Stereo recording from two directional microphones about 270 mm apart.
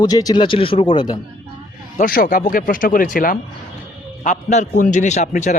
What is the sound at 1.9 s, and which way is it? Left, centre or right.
A man's voice, left.